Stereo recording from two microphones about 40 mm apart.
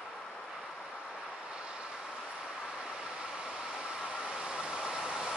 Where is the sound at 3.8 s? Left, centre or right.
Centre.